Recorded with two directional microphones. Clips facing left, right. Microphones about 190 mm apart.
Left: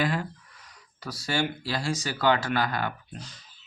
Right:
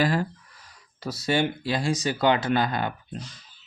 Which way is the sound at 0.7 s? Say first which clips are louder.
Right 5 dB; 25° right (ahead or behind).